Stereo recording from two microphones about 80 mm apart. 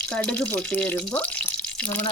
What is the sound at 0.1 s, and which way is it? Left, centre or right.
Speech, centre.